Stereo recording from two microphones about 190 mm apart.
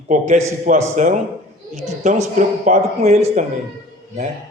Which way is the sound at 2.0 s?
40° right (ahead or behind).